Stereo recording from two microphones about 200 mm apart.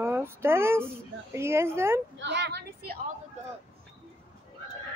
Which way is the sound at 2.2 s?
60° right (ahead or behind).